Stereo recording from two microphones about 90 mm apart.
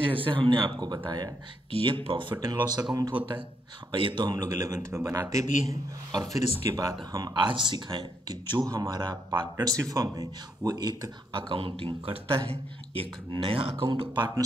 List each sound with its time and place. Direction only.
0.0 s speech: 75° right (ahead or behind); by 1.3 s 50° right (ahead or behind)
1.7 s speech: 90° right
2.0 s speech: 65° right (ahead or behind)
2.4 s speech: 50° right (ahead or behind)
3.9 s speech: 65° right (ahead or behind)
4.8 s speech: 30° right (ahead or behind)
5.3 s speech: 40° right (ahead or behind)
7.3 s speech: 60° right (ahead or behind)
8.5 s speech: 40° right (ahead or behind)
8.8 s speech: 55° right (ahead or behind)
9.8 s speech: 45° right (ahead or behind)
11.4 s speech: 75° right (ahead or behind)
13.8 s speech: 60° right (ahead or behind)